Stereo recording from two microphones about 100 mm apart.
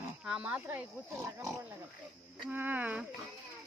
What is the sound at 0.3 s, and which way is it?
Speech, 10° right (ahead or behind).